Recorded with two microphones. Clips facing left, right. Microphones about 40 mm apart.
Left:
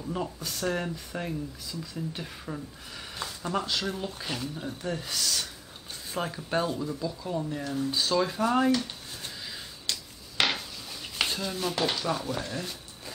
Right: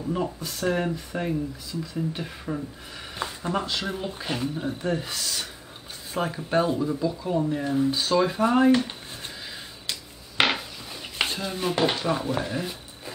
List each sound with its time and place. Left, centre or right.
0.0 s speech: centre
3.2 s a sound: right
3.6 s speech: centre
5.1 s speech: centre
10.3 s dishes: right